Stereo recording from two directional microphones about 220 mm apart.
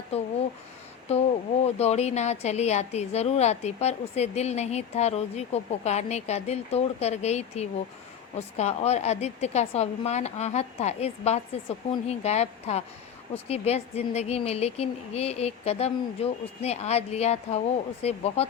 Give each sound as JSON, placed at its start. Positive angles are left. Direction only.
{"t": 0.1, "sound": "a woman's voice", "side_deg": 30}
{"t": 1.6, "sound": "a woman's voice", "side_deg": 30}